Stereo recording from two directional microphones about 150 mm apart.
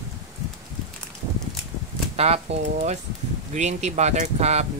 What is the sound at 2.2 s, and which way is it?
Speech, 45° right (ahead or behind).